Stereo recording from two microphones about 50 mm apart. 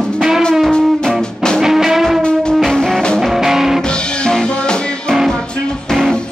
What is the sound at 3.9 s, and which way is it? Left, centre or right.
Music, centre.